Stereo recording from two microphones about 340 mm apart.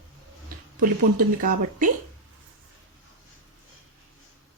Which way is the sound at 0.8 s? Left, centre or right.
Right.